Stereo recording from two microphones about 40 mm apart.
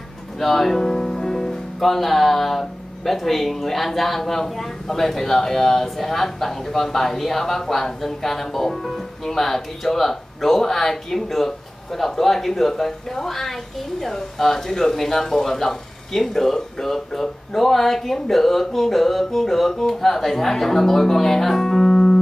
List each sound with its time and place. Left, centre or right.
0.4 s speech: centre
21.9 s music: left